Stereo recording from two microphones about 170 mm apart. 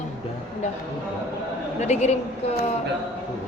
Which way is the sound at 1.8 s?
40° left (ahead or behind).